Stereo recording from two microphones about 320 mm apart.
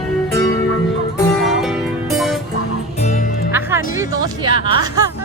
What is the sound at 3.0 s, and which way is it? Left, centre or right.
Music, left.